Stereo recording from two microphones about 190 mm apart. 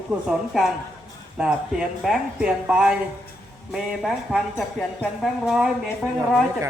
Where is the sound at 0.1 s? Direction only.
5° right (ahead or behind).